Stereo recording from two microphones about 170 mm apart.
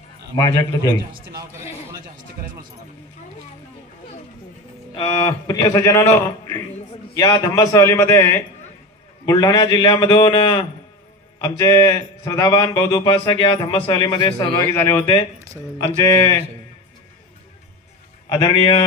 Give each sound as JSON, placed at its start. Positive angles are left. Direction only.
{"t": 4.9, "sound": "speech", "side_deg": 30}
{"t": 11.4, "sound": "speech", "side_deg": 20}
{"t": 14.8, "sound": "speech", "side_deg": 15}
{"t": 15.3, "sound": "speech", "side_deg": -20}
{"t": 15.8, "sound": "speech", "side_deg": 20}
{"t": 18.3, "sound": "a man's voice", "side_deg": 35}